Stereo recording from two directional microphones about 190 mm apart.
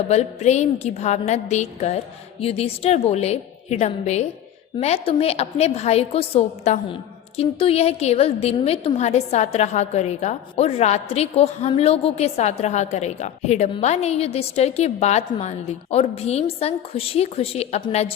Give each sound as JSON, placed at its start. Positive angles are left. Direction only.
{"t": 0.1, "sound": "a woman's voice", "side_deg": 35}